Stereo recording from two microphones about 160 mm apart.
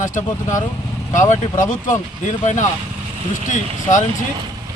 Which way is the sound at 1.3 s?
55° left (ahead or behind).